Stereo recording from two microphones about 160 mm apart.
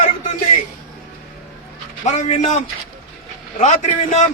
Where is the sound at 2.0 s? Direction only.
50° left (ahead or behind).